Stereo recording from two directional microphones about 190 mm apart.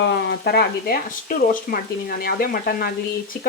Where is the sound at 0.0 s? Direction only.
65° left (ahead or behind).